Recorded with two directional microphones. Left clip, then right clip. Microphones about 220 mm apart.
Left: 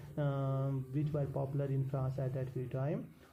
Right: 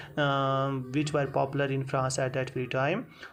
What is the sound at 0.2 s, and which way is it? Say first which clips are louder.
Speech: right 12 dB; 20° right (ahead or behind).